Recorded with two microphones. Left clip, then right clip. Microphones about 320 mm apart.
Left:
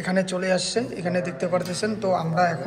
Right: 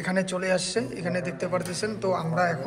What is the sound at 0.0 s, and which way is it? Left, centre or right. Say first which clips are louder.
A man's voice: left 3 dB; centre.